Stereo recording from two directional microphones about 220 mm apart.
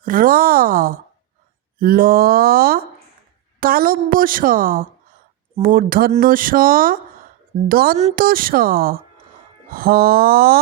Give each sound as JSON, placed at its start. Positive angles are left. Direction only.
{"t": 0.0, "sound": "speech", "side_deg": -40}